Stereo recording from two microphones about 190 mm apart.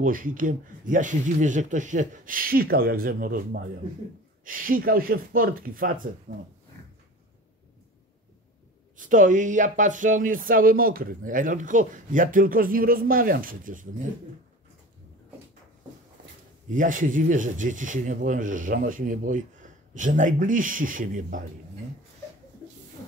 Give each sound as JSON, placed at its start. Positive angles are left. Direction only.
{"t": 0.0, "sound": "speech", "side_deg": -45}
{"t": 8.9, "sound": "speech", "side_deg": -45}
{"t": 16.6, "sound": "speech", "side_deg": -45}